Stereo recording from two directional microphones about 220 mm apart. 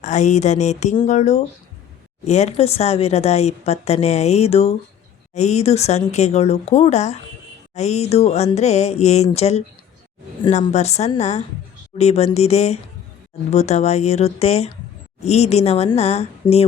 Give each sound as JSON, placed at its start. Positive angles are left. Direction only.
{"t": 0.0, "sound": "speech", "side_deg": 30}